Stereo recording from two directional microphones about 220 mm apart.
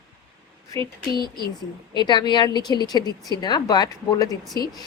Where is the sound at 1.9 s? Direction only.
20° left (ahead or behind).